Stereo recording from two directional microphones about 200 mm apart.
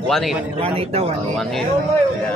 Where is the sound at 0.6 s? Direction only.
30° right (ahead or behind).